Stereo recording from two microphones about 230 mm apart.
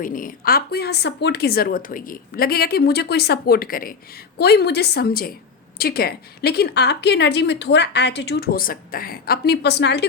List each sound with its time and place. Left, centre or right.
0.0 s a woman's voice: left